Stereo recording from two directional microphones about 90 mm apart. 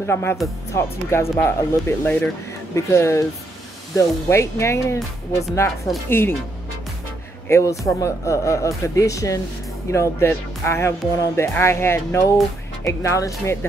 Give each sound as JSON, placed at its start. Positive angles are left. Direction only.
{"t": 0.0, "sound": "speech", "side_deg": 25}
{"t": 6.0, "sound": "speech", "side_deg": 25}
{"t": 7.4, "sound": "a man's voice", "side_deg": 30}